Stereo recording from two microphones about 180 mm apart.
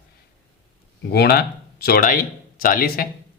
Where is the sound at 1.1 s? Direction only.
60° left (ahead or behind).